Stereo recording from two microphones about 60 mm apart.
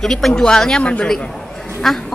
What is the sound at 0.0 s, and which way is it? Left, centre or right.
A woman's voice, centre.